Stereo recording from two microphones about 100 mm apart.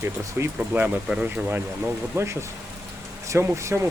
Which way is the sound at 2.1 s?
30° right (ahead or behind).